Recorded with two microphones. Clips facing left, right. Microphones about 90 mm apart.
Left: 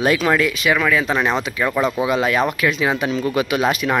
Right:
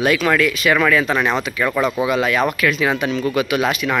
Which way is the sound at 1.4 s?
25° left (ahead or behind).